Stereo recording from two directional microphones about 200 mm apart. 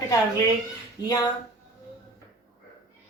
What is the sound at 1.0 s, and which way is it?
Speech, 20° left (ahead or behind).